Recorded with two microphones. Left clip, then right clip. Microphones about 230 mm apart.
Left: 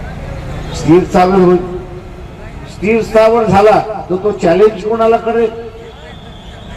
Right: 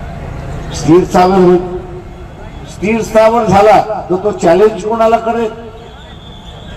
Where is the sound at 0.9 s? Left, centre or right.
Right.